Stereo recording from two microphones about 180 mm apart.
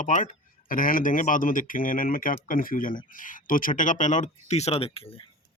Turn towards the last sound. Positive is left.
turn(degrees=30)  # may be behind; listen again after turning